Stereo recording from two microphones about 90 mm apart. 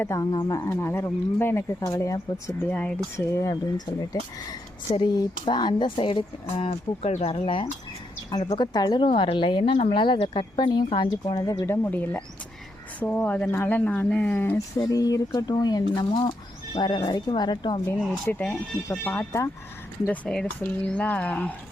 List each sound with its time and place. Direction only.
0.3 s speech: 50° left (ahead or behind)
0.5 s speech: 30° left (ahead or behind)
1.9 s speech: 35° left (ahead or behind)
2.6 s speech: 20° left (ahead or behind)
3.2 s speech: 35° left (ahead or behind)
4.9 s speech: 55° left (ahead or behind)
6.6 s speech: 90° left
8.3 s speech: 55° left (ahead or behind)
9.0 s speech: 75° left (ahead or behind); by 11.4 s 55° left (ahead or behind)
11.6 s speech: 25° left (ahead or behind)
14.8 s speech: 45° left (ahead or behind)
18.3 s speech: 15° left (ahead or behind)
20.1 s speech: 10° left (ahead or behind)